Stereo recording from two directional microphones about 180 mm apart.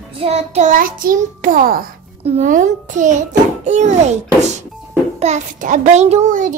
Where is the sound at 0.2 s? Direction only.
35° right (ahead or behind).